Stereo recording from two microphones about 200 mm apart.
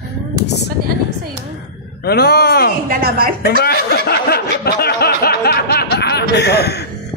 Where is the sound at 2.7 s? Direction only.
50° right (ahead or behind).